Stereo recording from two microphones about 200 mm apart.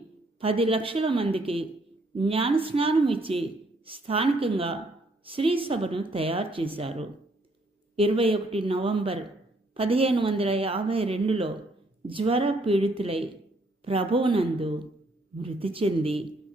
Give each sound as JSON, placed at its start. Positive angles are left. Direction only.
{"t": 0.3, "sound": "speech", "side_deg": -30}